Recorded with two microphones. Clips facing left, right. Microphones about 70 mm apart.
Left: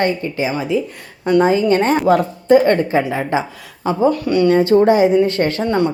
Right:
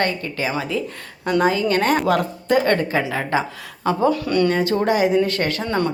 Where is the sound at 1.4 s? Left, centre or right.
Left.